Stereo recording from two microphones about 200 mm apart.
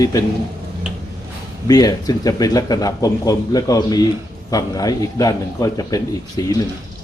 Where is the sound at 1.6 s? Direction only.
20° left (ahead or behind).